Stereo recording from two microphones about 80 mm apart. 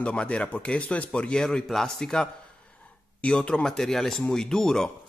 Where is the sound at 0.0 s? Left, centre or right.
Centre.